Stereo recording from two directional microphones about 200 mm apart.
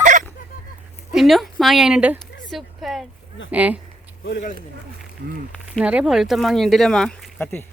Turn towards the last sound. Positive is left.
turn(degrees=0)  # may be behind; listen again after turning